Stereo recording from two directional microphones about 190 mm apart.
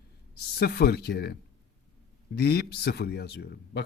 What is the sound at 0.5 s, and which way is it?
Speech, 60° left (ahead or behind).